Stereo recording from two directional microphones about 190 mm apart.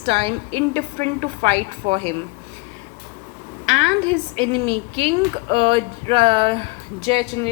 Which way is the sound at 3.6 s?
35° right (ahead or behind).